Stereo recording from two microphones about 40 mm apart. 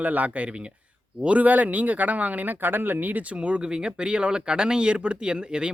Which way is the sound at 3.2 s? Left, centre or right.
Right.